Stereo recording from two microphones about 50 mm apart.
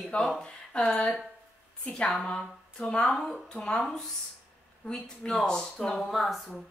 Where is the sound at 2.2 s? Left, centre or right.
Left.